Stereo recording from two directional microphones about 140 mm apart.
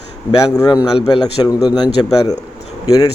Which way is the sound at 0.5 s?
30° left (ahead or behind).